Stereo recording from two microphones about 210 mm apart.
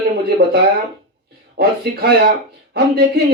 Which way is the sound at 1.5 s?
50° right (ahead or behind).